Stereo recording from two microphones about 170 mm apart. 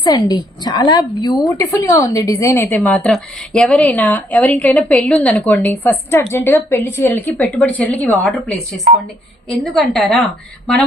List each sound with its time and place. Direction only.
0.0 s a woman's voice: 25° left (ahead or behind)
9.7 s a woman's voice: centre (ahead or behind)